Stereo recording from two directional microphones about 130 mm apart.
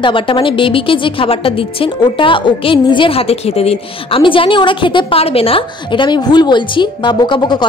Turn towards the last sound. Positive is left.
turn(degrees=35)  # may be behind; listen again after turning